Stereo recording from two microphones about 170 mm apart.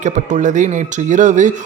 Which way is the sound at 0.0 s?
45° right (ahead or behind).